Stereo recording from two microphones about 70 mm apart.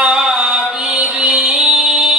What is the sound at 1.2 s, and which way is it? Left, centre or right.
Music, centre.